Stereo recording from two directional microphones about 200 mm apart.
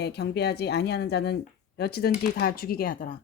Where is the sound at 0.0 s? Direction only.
55° left (ahead or behind).